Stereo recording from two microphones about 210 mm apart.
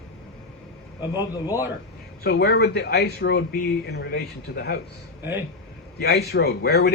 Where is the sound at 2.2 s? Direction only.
50° left (ahead or behind).